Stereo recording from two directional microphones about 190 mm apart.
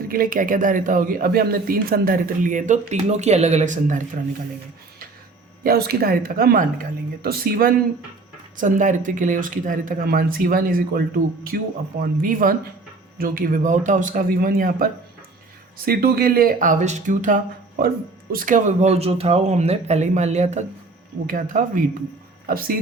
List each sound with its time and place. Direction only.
0.1 s speech: 50° right (ahead or behind)
5.6 s speech: 55° right (ahead or behind)
15.9 s speech: 55° right (ahead or behind)